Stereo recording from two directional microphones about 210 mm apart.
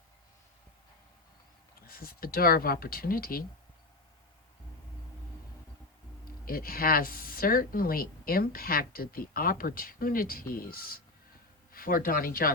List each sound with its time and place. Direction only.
1.9 s speech: 45° left (ahead or behind)
6.4 s speech: 45° left (ahead or behind)